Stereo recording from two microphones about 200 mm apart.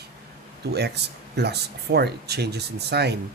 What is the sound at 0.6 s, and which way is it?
Speech, 55° right (ahead or behind).